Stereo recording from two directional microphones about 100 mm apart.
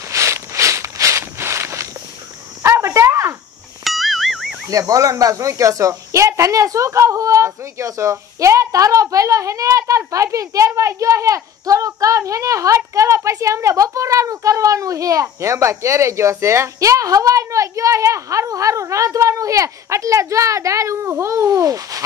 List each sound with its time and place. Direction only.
0.1 s walk: 30° right (ahead or behind)
2.6 s cricket: 30° right (ahead or behind)
3.8 s music: centre (ahead or behind)
4.6 s speech: 35° right (ahead or behind)